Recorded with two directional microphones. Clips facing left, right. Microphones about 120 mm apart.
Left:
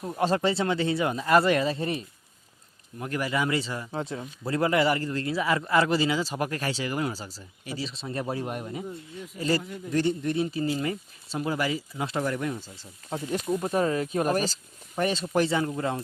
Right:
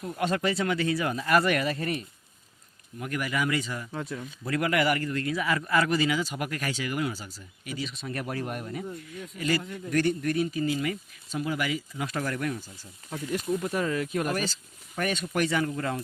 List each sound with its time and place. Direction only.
0.0 s speech: 30° left (ahead or behind)